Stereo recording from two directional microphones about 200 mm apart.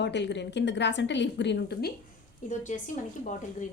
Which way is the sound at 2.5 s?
40° left (ahead or behind).